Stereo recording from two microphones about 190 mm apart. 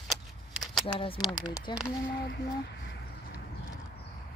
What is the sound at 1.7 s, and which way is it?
Speech, 25° left (ahead or behind).